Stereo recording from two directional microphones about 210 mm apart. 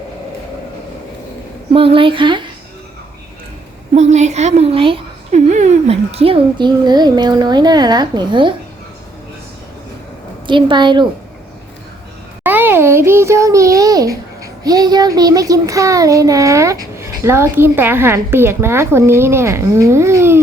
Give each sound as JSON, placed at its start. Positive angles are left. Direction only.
{"t": 1.7, "sound": "a woman's voice", "side_deg": -25}
{"t": 3.9, "sound": "a woman's voice", "side_deg": -30}
{"t": 10.4, "sound": "a woman's voice", "side_deg": -25}
{"t": 12.4, "sound": "a child's voice", "side_deg": -10}